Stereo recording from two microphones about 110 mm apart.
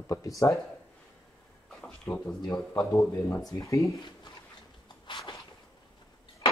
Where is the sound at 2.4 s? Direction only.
35° left (ahead or behind).